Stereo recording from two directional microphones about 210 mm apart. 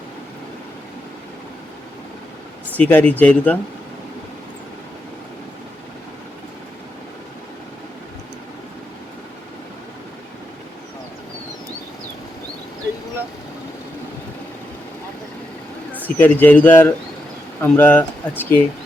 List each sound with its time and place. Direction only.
2.7 s speech: 5° left (ahead or behind)
16.0 s speech: 10° left (ahead or behind)